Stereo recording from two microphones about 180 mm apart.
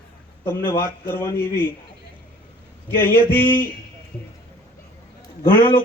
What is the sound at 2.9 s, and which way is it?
Speech, 10° left (ahead or behind).